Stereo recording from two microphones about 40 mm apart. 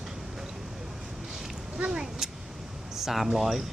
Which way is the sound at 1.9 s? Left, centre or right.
Centre.